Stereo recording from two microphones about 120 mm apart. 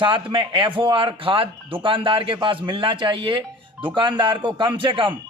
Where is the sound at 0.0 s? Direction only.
45° right (ahead or behind).